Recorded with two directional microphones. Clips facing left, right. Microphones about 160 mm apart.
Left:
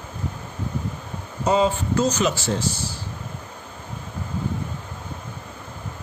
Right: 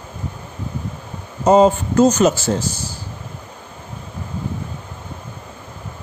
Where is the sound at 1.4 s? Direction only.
45° right (ahead or behind).